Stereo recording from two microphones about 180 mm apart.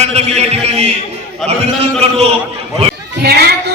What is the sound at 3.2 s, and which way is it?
Speech, 65° right (ahead or behind).